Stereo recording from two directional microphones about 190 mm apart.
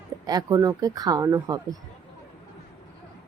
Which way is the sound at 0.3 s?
20° right (ahead or behind).